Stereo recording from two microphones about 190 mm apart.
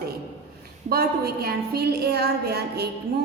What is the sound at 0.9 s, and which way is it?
A woman's voice, 55° right (ahead or behind).